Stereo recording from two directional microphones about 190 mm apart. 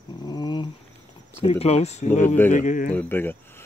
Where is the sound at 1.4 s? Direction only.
35° left (ahead or behind).